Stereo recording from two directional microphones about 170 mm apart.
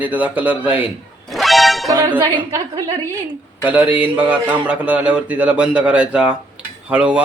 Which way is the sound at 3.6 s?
10° right (ahead or behind).